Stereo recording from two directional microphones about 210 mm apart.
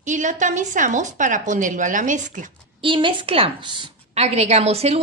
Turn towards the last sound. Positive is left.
turn(degrees=-30)  # may be behind; listen again after turning